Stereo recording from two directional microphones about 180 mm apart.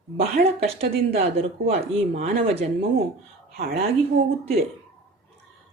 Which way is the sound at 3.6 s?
55° right (ahead or behind).